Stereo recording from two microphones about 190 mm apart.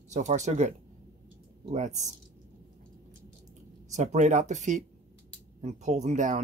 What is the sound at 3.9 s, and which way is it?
Speech, 40° right (ahead or behind).